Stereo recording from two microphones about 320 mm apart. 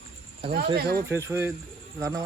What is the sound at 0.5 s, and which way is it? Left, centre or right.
Speech, right.